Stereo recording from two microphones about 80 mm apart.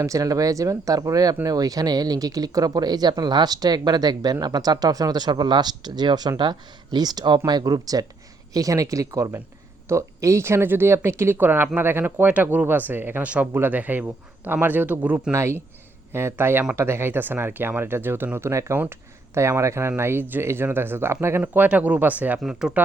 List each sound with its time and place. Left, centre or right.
0.0 s speech: right
15.3 s speech: right
22.4 s speech: centre